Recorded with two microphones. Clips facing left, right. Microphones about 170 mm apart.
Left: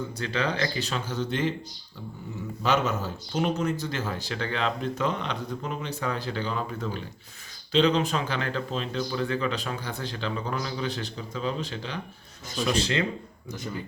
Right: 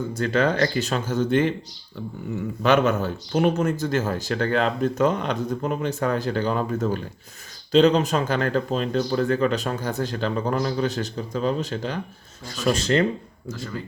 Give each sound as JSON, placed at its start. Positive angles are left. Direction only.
{"t": 0.1, "sound": "speech", "side_deg": -50}
{"t": 2.6, "sound": "speech", "side_deg": -60}